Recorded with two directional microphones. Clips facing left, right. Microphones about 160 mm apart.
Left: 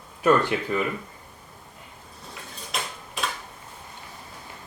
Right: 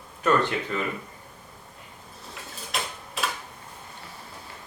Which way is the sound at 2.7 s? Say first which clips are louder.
Even; centre (ahead or behind).